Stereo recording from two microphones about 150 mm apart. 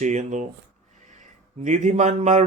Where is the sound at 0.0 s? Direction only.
55° right (ahead or behind).